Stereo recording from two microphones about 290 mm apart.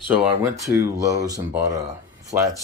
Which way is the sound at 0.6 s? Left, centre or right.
Centre.